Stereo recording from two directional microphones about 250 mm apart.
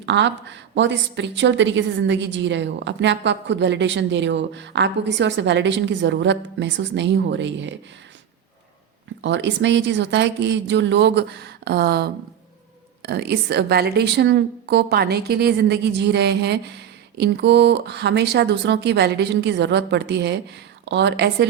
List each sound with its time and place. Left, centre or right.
0.0 s a woman's voice: right
9.2 s a woman's voice: right